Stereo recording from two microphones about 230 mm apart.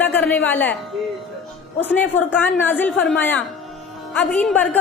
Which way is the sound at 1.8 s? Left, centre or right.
Centre.